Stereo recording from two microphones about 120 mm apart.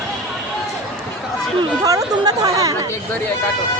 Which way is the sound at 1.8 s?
30° right (ahead or behind).